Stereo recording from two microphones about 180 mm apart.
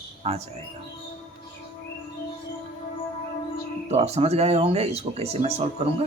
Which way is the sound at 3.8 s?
35° right (ahead or behind).